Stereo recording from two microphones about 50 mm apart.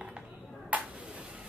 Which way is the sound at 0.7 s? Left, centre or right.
Right.